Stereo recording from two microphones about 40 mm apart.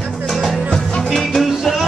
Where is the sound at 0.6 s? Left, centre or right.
Centre.